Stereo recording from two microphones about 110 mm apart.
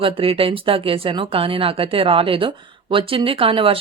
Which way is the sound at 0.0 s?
55° right (ahead or behind).